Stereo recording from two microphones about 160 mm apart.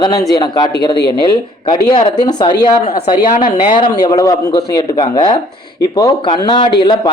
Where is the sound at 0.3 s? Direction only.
25° left (ahead or behind).